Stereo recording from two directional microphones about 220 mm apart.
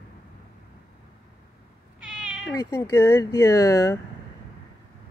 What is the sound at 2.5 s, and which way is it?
Speech, 15° left (ahead or behind).